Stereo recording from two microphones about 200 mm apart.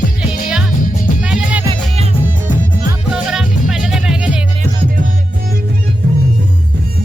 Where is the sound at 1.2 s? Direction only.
5° right (ahead or behind).